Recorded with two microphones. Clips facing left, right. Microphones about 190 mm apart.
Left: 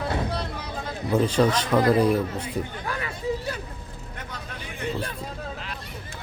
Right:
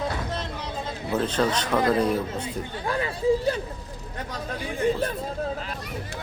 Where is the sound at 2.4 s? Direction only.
30° right (ahead or behind).